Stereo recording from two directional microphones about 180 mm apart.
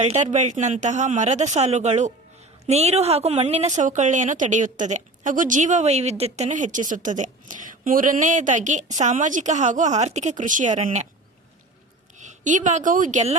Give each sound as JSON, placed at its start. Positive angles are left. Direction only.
{"t": 0.0, "sound": "a woman's voice", "side_deg": -40}
{"t": 12.1, "sound": "a woman's voice", "side_deg": -40}